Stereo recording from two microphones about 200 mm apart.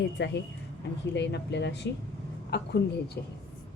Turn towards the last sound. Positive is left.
turn(degrees=55)  # may be behind; listen again after turning